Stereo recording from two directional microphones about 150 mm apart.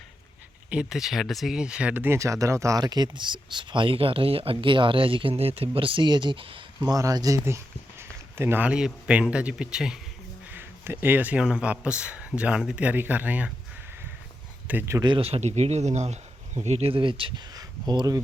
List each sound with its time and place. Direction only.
0.7 s speech: 5° right (ahead or behind); by 6.9 s 35° right (ahead or behind)
6.9 s speech: 25° right (ahead or behind); by 10.0 s 5° right (ahead or behind)
10.5 s speech: 15° right (ahead or behind)
14.7 s speech: 15° right (ahead or behind)
15.0 s speech: 35° right (ahead or behind)